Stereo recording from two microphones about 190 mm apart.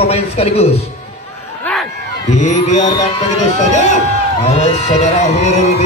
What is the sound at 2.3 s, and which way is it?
Speech, 40° left (ahead or behind).